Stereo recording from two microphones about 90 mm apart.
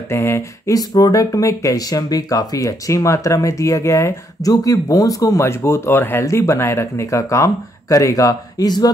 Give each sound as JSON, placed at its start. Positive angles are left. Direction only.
{"t": 0.1, "sound": "speech", "side_deg": 25}